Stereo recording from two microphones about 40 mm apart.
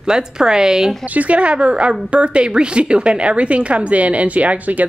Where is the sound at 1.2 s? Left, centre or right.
Right.